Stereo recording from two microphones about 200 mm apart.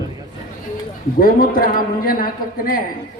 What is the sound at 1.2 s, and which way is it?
A man's voice, 45° left (ahead or behind).